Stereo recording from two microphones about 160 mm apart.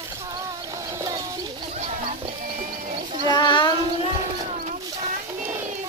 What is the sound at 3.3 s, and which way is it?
Child singing, 30° left (ahead or behind).